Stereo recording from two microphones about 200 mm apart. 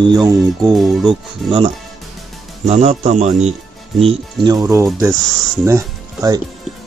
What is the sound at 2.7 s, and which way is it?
Speech, 35° right (ahead or behind).